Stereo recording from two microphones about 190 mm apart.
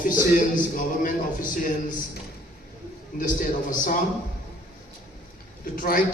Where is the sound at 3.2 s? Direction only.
45° left (ahead or behind).